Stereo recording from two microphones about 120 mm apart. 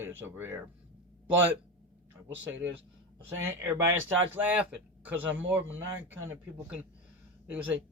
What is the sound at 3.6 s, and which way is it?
Speech, 25° right (ahead or behind).